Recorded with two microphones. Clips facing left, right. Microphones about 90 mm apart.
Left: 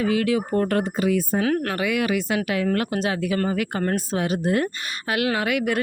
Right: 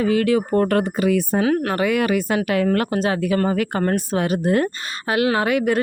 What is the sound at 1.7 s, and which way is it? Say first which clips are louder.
Speech: right 4 dB; 40° right (ahead or behind).